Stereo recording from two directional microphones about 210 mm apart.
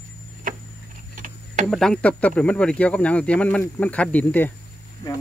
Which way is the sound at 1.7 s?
5° left (ahead or behind).